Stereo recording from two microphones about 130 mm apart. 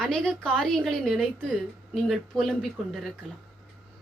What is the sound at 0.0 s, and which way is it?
A woman's voice, 5° left (ahead or behind).